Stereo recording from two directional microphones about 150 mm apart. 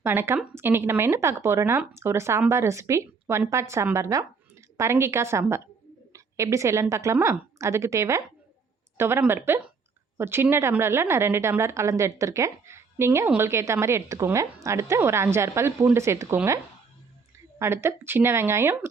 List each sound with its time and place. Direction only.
0.0 s a woman's voice: 15° right (ahead or behind)
17.6 s a woman's voice: 15° right (ahead or behind)